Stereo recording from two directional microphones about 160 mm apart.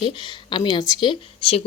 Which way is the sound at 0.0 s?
30° left (ahead or behind).